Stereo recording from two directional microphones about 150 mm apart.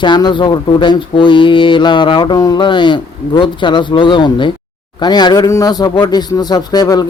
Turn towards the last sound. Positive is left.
turn(degrees=25)  # may be behind; listen again after turning